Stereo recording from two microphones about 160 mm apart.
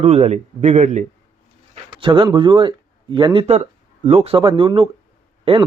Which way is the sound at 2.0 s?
30° right (ahead or behind).